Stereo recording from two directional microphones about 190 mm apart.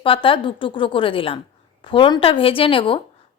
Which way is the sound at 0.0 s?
30° left (ahead or behind).